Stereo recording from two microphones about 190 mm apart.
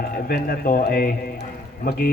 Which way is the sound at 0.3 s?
50° left (ahead or behind).